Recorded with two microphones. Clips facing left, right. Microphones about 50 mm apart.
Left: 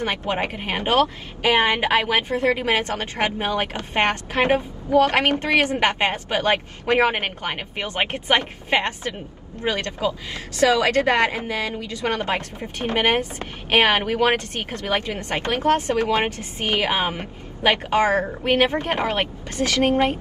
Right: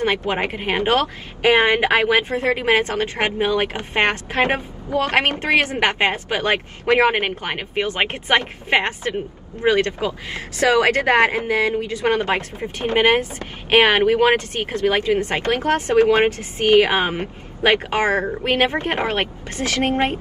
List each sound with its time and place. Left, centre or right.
0.3 s speech: right